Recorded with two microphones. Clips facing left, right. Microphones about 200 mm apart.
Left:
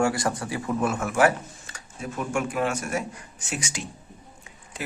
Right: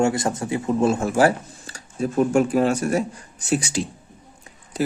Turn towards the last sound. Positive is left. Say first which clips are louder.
# right 12 dB
turn(degrees=-40)  # may be behind; listen again after turning